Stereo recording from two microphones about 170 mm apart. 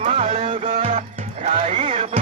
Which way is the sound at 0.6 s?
45° right (ahead or behind).